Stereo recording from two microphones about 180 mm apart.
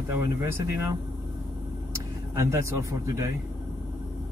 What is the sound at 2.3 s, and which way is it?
Speech, 15° right (ahead or behind).